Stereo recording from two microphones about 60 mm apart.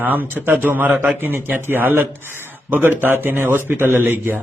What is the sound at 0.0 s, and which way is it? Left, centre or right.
A man's voice, right.